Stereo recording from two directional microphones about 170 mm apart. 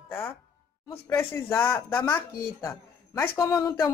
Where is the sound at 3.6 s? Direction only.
25° left (ahead or behind).